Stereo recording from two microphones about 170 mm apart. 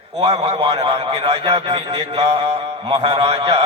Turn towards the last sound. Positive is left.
turn(degrees=-35)  # may be behind; listen again after turning